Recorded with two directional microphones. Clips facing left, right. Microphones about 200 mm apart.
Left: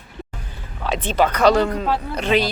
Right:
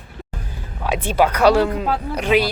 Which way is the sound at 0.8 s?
10° right (ahead or behind).